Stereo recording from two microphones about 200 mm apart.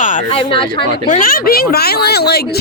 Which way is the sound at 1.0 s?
45° left (ahead or behind).